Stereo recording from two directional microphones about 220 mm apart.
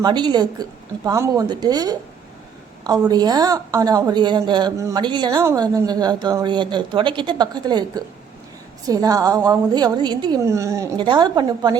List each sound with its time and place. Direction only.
0.0 s a woman's voice: 20° right (ahead or behind)
3.1 s a woman's voice: 20° right (ahead or behind)